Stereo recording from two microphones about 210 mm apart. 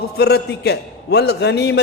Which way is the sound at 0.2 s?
50° left (ahead or behind).